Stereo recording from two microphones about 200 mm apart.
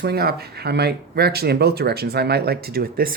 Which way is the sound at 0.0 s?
50° right (ahead or behind).